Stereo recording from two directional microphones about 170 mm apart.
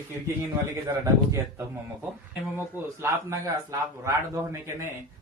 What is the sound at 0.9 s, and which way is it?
A man's voice, 15° right (ahead or behind).